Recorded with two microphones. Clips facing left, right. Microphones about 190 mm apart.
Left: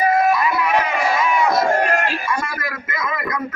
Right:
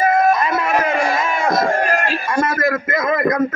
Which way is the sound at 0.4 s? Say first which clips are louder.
Right 1 dB; 45° right (ahead or behind).